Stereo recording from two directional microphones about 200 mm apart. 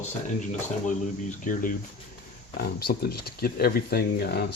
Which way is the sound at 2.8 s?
50° left (ahead or behind).